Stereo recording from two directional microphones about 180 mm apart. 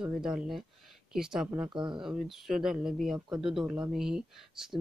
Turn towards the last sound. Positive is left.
turn(degrees=-5)  # may be behind; listen again after turning